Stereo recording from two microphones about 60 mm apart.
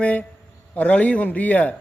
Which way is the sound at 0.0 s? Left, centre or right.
Left.